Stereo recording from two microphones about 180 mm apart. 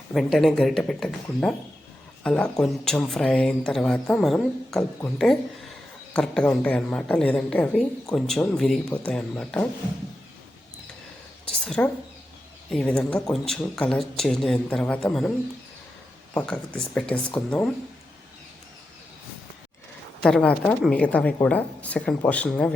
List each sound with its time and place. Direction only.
0.1 s a woman's voice: centre (ahead or behind)
11.6 s speech: 5° left (ahead or behind)
16.3 s a woman's voice: 5° left (ahead or behind)
20.2 s a woman's voice: 5° left (ahead or behind)